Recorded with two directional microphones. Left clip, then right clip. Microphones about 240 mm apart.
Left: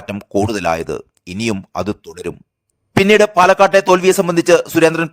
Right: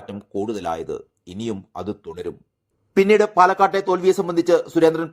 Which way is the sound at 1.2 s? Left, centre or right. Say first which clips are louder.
Left 9 dB; left.